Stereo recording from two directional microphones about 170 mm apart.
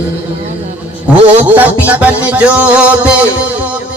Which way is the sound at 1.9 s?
10° right (ahead or behind).